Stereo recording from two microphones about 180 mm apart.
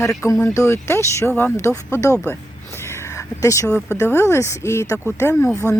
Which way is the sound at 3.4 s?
20° left (ahead or behind).